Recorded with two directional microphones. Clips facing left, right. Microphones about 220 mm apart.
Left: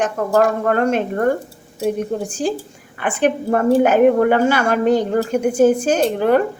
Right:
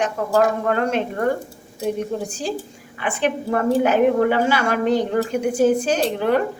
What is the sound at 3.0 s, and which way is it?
Speech, 50° left (ahead or behind).